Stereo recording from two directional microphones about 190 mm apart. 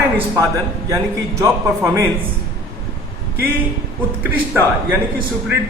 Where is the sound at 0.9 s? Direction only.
15° right (ahead or behind).